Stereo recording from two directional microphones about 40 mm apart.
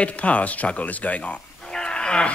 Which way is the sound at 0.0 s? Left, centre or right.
Left.